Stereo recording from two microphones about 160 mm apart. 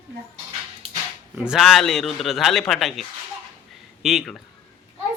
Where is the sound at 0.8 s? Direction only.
35° right (ahead or behind).